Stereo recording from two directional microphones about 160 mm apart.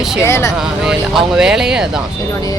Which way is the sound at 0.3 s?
15° left (ahead or behind).